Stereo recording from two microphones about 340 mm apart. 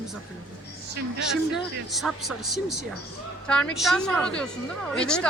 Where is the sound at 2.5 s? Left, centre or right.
Left.